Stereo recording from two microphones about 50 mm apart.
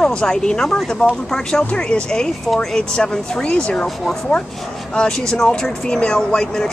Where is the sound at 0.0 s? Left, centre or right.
Centre.